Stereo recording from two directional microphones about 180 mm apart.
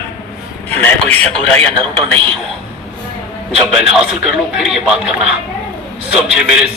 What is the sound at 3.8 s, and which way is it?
Speech, centre (ahead or behind).